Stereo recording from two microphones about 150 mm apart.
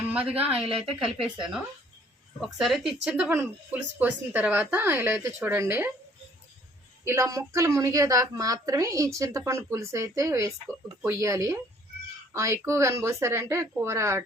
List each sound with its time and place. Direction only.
0.1 s a woman's voice: 10° right (ahead or behind)
7.0 s a woman's voice: 20° right (ahead or behind)